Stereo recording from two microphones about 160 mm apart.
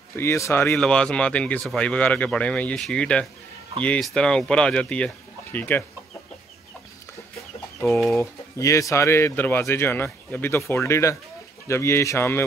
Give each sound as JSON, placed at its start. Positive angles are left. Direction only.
{"t": 0.1, "sound": "speech", "side_deg": 15}
{"t": 8.1, "sound": "speech", "side_deg": 20}